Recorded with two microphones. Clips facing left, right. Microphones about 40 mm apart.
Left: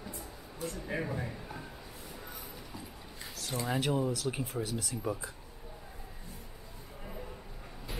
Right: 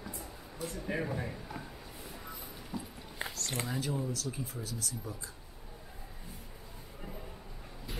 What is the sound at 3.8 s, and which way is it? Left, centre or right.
Speech, left.